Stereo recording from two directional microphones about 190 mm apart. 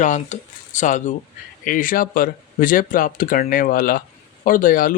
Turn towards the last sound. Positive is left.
turn(degrees=45)  # may be behind; listen again after turning